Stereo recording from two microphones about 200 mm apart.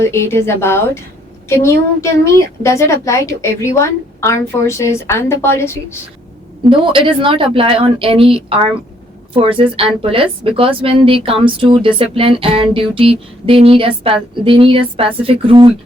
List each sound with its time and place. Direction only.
0.1 s a woman's voice: 15° left (ahead or behind)
6.7 s speech: 25° right (ahead or behind)